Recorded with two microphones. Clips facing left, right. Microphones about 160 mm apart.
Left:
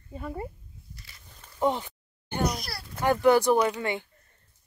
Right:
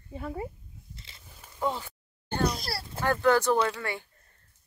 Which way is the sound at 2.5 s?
30° right (ahead or behind).